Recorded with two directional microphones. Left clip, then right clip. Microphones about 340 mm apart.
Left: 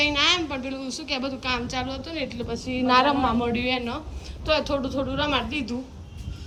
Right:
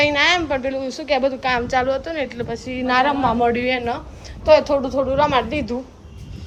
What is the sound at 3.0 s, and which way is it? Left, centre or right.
Speech, left.